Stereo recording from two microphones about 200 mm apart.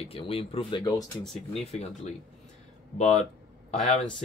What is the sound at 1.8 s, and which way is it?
Speech, 35° left (ahead or behind).